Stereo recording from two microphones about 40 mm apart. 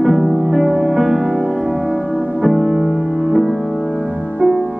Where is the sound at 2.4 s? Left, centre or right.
Centre.